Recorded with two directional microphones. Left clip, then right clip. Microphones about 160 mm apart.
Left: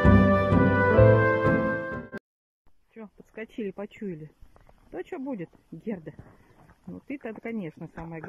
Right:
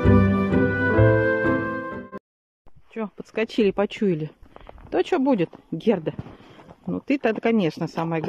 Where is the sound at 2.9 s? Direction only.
10° right (ahead or behind).